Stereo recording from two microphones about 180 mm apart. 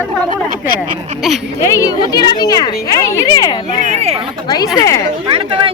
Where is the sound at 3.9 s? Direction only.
35° right (ahead or behind).